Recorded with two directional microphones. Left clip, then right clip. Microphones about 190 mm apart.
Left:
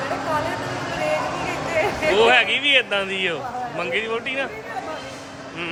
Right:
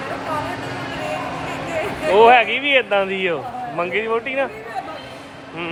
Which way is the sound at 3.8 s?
25° right (ahead or behind).